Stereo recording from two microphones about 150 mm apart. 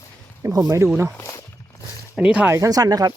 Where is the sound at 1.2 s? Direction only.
20° left (ahead or behind).